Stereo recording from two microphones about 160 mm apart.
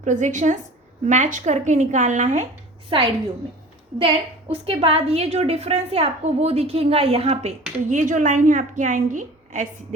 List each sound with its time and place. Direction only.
0.0 s speech: 50° right (ahead or behind)
2.9 s a woman's voice: 35° right (ahead or behind); by 9.6 s 55° right (ahead or behind)